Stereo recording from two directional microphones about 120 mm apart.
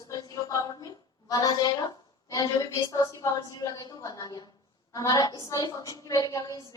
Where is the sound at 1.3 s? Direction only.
30° left (ahead or behind).